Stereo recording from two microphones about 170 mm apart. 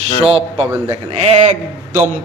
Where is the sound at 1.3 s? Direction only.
40° right (ahead or behind).